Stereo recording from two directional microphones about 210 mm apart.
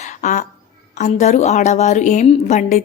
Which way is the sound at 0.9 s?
35° left (ahead or behind).